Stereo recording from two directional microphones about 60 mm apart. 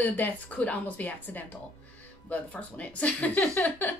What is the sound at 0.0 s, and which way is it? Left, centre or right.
A woman's voice, left.